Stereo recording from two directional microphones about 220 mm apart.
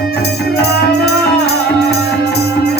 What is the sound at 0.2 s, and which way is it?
Music, 50° left (ahead or behind).